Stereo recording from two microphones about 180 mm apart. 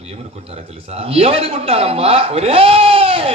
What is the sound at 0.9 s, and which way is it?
Speech, 35° right (ahead or behind).